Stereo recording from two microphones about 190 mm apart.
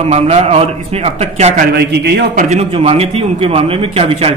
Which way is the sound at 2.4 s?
35° right (ahead or behind).